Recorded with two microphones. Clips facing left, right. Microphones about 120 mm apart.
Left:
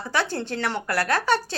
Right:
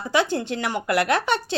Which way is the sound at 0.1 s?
15° right (ahead or behind).